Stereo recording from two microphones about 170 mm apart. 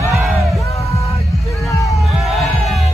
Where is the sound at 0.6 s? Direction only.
20° left (ahead or behind).